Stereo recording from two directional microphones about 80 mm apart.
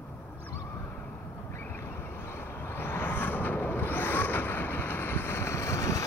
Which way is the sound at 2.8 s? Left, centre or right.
Left.